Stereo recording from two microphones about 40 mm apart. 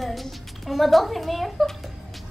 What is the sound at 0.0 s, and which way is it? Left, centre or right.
A child's voice, centre.